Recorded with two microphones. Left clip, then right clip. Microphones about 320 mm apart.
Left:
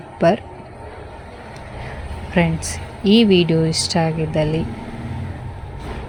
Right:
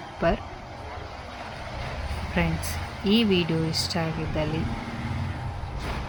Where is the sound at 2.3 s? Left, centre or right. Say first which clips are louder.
Left 9 dB; centre.